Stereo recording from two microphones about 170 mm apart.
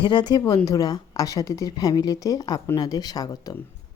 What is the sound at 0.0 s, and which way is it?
A woman's voice, 25° left (ahead or behind).